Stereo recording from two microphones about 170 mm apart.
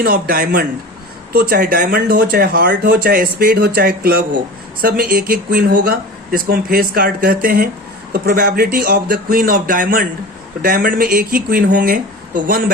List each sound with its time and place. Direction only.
0.0 s speech: 60° right (ahead or behind)